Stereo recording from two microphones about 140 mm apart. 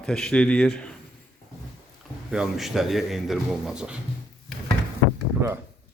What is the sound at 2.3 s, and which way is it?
A man's voice, 5° right (ahead or behind).